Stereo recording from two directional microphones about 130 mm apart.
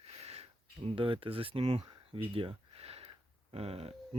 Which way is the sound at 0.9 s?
45° right (ahead or behind).